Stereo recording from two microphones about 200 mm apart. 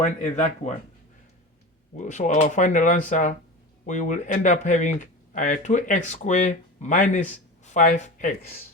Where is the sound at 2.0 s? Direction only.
40° left (ahead or behind).